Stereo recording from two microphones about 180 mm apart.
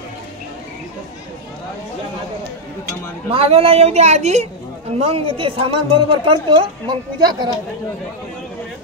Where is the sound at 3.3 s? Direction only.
35° right (ahead or behind).